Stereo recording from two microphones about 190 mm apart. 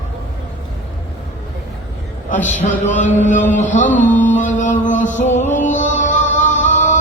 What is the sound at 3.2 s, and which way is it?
Chant, 40° left (ahead or behind).